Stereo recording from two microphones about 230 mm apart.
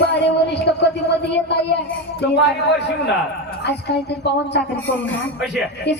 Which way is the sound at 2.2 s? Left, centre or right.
Left.